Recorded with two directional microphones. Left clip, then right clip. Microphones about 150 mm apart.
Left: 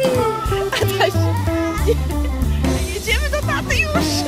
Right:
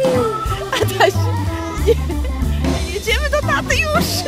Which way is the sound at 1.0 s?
40° right (ahead or behind).